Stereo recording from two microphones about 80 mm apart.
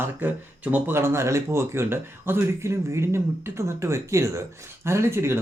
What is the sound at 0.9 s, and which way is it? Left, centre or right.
Speech, right.